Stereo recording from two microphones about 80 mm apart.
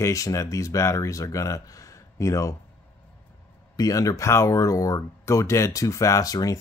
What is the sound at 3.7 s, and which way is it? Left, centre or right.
Speech, left.